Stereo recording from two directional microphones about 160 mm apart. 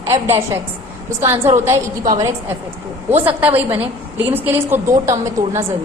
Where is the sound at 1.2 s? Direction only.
15° right (ahead or behind).